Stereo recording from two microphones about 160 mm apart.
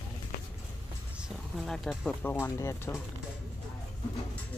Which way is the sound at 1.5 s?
5° left (ahead or behind).